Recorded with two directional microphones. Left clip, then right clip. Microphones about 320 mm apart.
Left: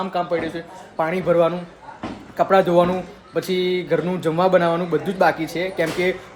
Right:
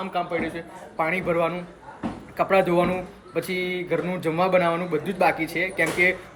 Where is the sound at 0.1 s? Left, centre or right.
Centre.